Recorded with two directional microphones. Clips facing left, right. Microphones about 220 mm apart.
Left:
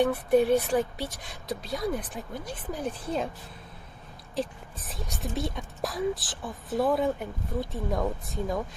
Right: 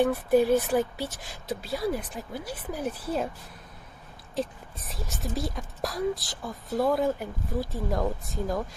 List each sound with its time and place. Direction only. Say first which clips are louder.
0.0 s speech: even; centre (ahead or behind)
4.9 s speech: right 1 dB; centre (ahead or behind)